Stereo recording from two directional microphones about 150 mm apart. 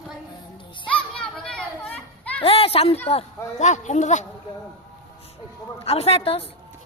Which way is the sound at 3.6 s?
55° left (ahead or behind).